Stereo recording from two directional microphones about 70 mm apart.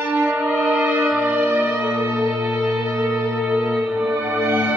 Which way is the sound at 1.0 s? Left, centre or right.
Centre.